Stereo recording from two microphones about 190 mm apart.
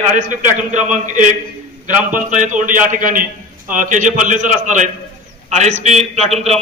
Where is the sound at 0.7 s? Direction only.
40° right (ahead or behind).